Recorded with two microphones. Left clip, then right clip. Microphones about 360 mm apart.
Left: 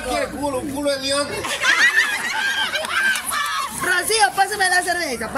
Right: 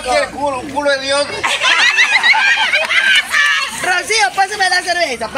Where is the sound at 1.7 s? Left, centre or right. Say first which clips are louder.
Right 5 dB; right.